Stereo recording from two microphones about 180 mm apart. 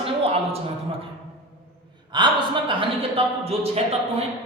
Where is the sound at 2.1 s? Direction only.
25° right (ahead or behind).